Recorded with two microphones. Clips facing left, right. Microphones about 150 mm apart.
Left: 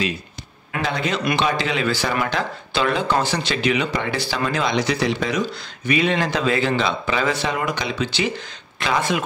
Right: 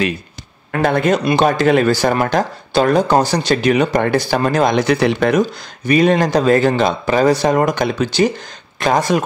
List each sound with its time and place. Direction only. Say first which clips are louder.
0.7 s speech: right 9 dB; 50° right (ahead or behind)